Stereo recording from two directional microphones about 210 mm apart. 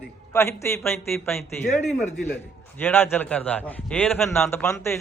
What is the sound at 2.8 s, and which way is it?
A man's voice, 10° left (ahead or behind).